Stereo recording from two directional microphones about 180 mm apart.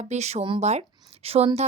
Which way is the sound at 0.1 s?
40° right (ahead or behind).